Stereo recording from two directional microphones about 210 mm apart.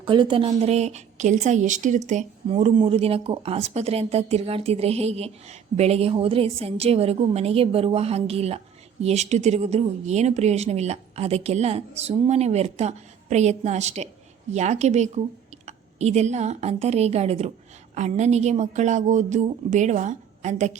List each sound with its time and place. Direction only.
0.0 s a woman's voice: 20° right (ahead or behind)